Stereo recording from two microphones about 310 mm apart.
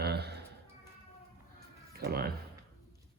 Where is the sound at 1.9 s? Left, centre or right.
Right.